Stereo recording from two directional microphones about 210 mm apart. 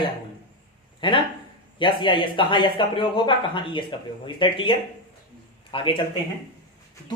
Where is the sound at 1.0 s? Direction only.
25° left (ahead or behind).